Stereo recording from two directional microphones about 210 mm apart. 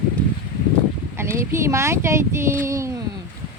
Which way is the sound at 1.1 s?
10° right (ahead or behind).